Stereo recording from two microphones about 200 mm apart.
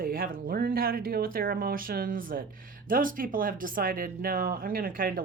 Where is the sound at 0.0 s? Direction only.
45° right (ahead or behind).